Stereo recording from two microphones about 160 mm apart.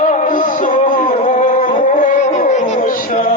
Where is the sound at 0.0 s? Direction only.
50° left (ahead or behind).